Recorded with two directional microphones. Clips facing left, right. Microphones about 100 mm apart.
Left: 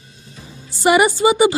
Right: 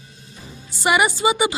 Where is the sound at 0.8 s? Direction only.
35° left (ahead or behind).